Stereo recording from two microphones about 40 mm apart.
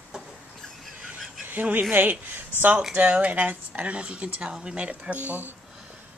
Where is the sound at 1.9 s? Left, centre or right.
Right.